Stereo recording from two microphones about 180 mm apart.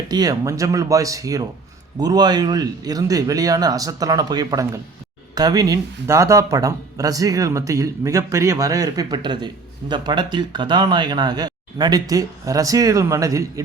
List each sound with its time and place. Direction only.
0.1 s speech: 20° right (ahead or behind)